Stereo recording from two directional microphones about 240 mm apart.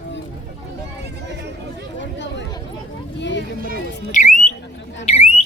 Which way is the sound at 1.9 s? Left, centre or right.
Left.